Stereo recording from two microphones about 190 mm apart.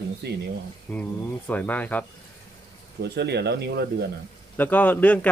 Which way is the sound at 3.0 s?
60° right (ahead or behind).